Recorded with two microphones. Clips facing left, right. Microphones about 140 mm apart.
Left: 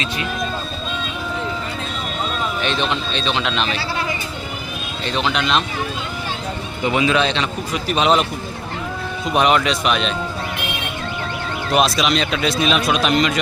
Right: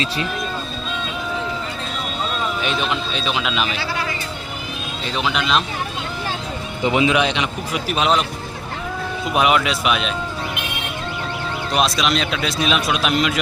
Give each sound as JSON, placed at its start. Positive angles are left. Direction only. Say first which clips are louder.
{"t": 2.6, "sound": "a man's voice", "louder": "left 3 dB", "side_deg": -5}
{"t": 5.0, "sound": "a man's voice", "louder": "left 1 dB", "side_deg": -5}
{"t": 6.8, "sound": "a man's voice", "louder": "even", "side_deg": -20}
{"t": 11.7, "sound": "a man's voice", "louder": "left 2 dB", "side_deg": 0}